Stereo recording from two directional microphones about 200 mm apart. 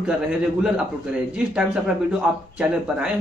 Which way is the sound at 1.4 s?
5° right (ahead or behind).